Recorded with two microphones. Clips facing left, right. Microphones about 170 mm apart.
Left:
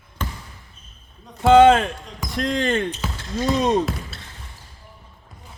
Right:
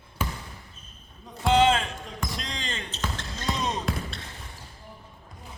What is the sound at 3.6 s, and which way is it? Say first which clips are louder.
Basketball bounce: left 12 dB; 55° left (ahead or behind).